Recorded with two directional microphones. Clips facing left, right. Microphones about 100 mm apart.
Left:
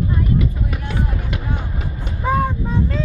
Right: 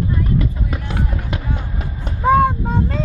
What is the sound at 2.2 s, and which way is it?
Vehicle, 55° right (ahead or behind).